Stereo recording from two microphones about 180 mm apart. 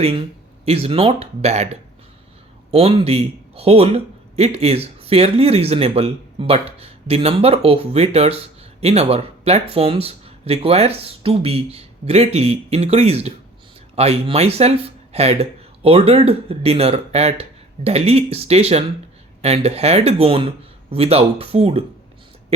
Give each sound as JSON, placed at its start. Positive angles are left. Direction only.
{"t": 0.6, "sound": "speech", "side_deg": -35}